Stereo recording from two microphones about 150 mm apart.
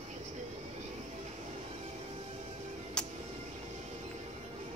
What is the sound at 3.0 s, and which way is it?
Music, 5° left (ahead or behind).